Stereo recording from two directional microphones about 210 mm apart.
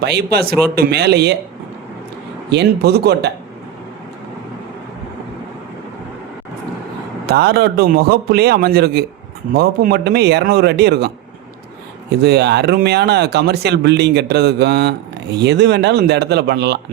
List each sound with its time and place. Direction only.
0.0 s speech: 50° right (ahead or behind)
2.5 s speech: 50° right (ahead or behind)
7.3 s speech: 50° right (ahead or behind)
12.2 s speech: 50° right (ahead or behind)